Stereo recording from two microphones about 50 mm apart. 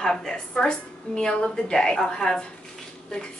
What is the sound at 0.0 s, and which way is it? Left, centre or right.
A woman's voice, centre.